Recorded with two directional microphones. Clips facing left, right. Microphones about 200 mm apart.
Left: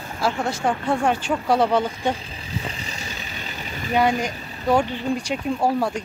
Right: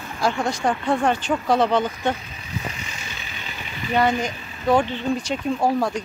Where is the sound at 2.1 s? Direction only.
30° left (ahead or behind).